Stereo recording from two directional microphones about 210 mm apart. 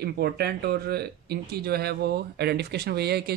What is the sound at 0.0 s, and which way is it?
Speech, 50° right (ahead or behind).